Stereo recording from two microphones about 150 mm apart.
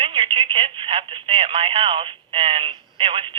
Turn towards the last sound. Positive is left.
turn(degrees=-35)  # may be behind; listen again after turning